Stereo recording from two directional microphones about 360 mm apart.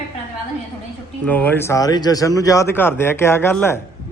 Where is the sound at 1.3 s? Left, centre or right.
Centre.